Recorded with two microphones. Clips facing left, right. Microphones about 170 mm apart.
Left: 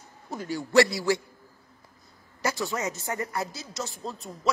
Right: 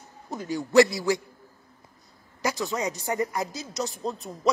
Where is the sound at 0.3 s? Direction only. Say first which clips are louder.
Right 2 dB; 20° right (ahead or behind).